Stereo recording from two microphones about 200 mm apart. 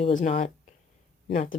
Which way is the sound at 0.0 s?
35° left (ahead or behind).